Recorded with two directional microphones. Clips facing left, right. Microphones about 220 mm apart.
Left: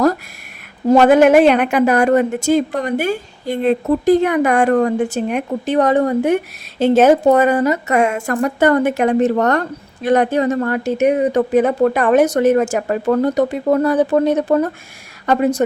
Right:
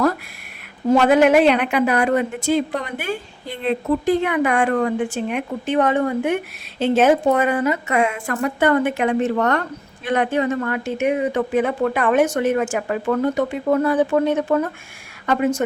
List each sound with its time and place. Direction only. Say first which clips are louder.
0.9 s speech: left 4 dB; 45° left (ahead or behind)